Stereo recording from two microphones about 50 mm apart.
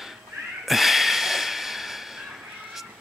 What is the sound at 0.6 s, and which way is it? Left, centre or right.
Snort, centre.